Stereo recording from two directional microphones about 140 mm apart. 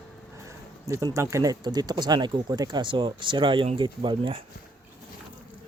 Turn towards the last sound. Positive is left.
turn(degrees=-40)  # may be behind; listen again after turning